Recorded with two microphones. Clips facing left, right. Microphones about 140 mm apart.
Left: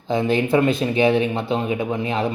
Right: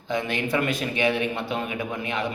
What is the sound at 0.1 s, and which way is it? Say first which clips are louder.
Speech: left 7 dB; 30° left (ahead or behind).